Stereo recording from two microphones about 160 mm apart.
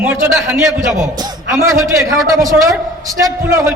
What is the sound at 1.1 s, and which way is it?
A man's voice, 25° right (ahead or behind).